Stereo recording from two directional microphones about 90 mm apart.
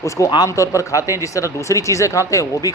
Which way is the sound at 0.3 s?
50° left (ahead or behind).